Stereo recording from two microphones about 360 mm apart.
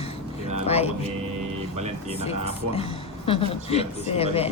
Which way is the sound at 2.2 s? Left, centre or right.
Centre.